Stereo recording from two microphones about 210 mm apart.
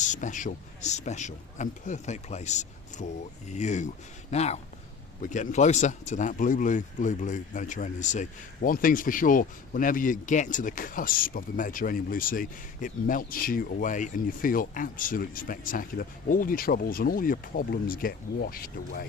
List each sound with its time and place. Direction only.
0.0 s speech: 35° left (ahead or behind)